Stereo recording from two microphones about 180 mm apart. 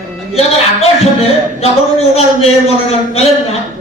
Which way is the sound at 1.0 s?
35° left (ahead or behind).